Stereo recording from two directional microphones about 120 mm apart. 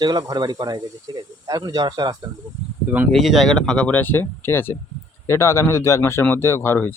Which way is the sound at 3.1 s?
Centre (ahead or behind).